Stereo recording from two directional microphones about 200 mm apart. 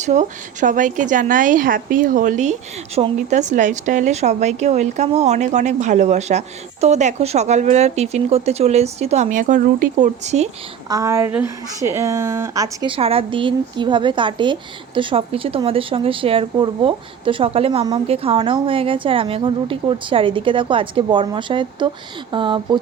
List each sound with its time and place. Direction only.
0.0 s speech: 35° right (ahead or behind)
10.8 s speech: 15° right (ahead or behind)